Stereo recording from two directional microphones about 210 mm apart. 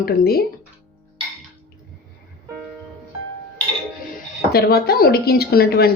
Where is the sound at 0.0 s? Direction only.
45° left (ahead or behind).